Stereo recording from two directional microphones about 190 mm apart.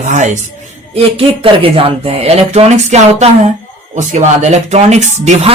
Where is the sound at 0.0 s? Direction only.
40° right (ahead or behind).